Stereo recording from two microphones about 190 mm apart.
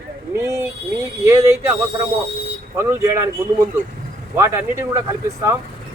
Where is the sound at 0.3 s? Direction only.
15° right (ahead or behind).